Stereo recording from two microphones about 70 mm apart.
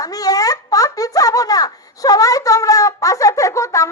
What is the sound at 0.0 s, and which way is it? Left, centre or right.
Speech, left.